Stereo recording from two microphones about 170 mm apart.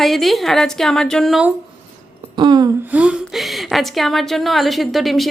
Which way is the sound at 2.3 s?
25° right (ahead or behind).